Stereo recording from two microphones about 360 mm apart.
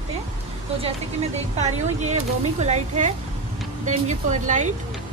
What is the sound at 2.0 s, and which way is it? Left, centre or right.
Speech, centre.